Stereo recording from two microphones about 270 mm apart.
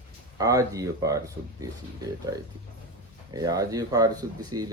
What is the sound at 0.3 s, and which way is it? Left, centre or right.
Speech, centre.